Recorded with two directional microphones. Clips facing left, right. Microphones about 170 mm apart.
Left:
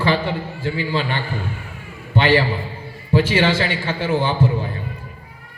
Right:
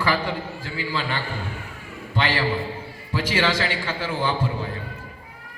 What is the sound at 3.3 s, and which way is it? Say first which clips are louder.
A man's voice: left 4 dB; 25° left (ahead or behind).